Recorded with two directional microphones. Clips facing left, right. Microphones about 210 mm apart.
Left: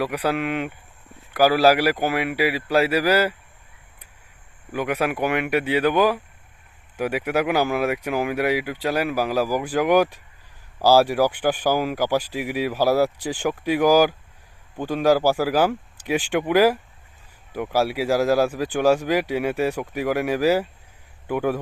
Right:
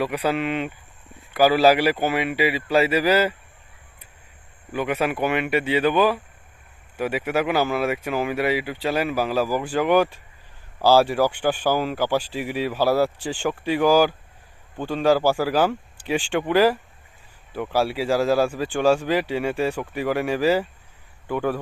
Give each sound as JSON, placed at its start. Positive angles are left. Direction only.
{"t": 0.0, "sound": "speech", "side_deg": 10}
{"t": 4.7, "sound": "speech", "side_deg": 10}